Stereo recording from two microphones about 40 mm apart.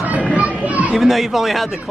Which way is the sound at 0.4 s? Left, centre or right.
Right.